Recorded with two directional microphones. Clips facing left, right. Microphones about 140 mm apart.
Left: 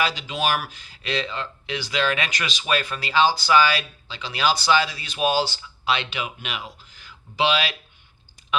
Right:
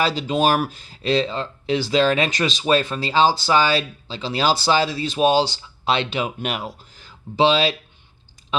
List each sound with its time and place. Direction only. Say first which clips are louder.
0.0 s speech: right 5 dB; 35° right (ahead or behind)
5.9 s speech: right 4 dB; 35° right (ahead or behind)